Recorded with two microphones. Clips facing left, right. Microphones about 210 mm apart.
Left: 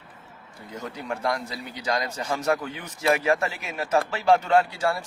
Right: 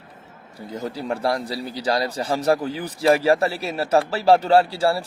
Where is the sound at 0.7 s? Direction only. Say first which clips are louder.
Right 6 dB; 35° right (ahead or behind).